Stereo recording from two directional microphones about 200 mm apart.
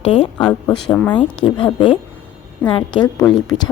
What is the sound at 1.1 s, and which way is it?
Speech, 25° left (ahead or behind).